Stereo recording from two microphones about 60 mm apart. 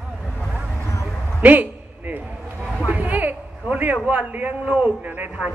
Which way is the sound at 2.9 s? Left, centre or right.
Right.